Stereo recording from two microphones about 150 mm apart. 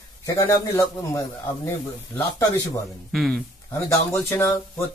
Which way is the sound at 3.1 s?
Centre (ahead or behind).